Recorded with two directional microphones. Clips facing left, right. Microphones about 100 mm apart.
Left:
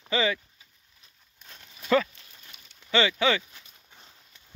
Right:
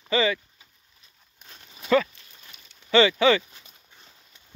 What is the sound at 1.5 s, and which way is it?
Horse, 10° right (ahead or behind).